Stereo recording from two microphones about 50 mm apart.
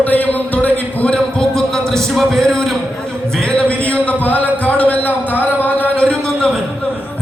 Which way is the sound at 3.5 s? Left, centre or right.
Left.